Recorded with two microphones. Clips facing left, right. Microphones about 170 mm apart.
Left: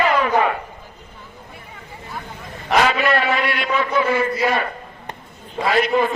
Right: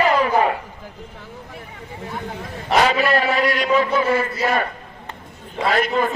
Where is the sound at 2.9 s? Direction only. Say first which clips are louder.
Even; 35° right (ahead or behind).